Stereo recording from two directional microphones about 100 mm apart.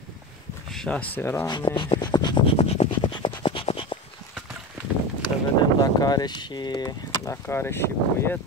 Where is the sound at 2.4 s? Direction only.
85° left.